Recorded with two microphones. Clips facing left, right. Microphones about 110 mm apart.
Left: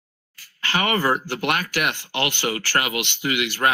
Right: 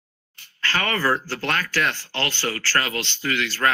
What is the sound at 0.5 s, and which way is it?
Speech, 15° left (ahead or behind).